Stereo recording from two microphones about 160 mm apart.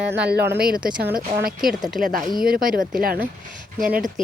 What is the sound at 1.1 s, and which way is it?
Speech, 65° right (ahead or behind).